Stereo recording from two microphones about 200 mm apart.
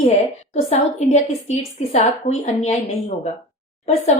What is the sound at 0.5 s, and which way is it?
A woman's voice, 35° left (ahead or behind).